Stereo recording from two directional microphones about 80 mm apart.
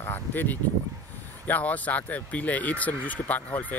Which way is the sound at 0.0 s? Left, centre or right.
Left.